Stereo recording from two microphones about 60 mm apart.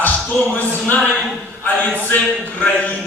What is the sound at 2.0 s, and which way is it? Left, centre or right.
Speech, left.